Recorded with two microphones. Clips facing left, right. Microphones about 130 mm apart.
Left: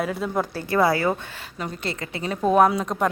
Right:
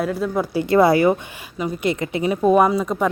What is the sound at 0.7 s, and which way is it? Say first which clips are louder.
A woman's voice: right 6 dB; 25° right (ahead or behind).